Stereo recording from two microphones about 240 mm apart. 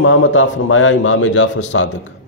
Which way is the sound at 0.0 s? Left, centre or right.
Left.